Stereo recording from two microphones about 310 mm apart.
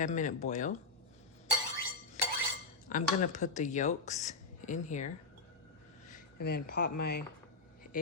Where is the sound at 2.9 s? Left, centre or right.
Left.